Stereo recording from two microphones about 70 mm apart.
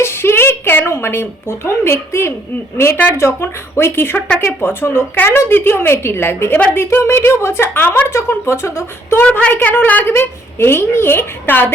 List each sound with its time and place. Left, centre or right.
0.0 s a woman's voice: left
9.8 s a woman's voice: left